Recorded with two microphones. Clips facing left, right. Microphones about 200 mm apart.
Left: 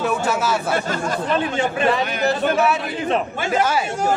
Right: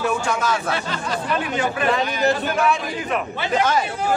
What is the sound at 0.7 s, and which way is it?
Speech, 45° left (ahead or behind).